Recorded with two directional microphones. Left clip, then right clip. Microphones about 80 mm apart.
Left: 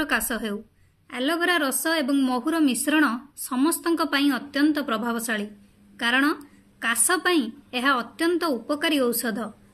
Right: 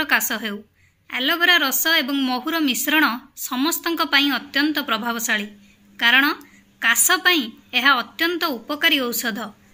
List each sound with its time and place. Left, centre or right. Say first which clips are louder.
0.0 s a woman's voice: right 5 dB; left